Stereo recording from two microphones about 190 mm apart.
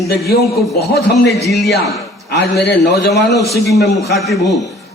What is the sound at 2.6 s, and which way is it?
Speech, 60° left (ahead or behind).